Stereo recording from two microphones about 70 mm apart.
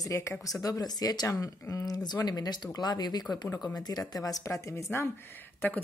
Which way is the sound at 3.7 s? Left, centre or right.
Left.